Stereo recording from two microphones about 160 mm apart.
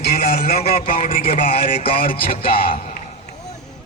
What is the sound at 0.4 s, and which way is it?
Speech, 70° left (ahead or behind).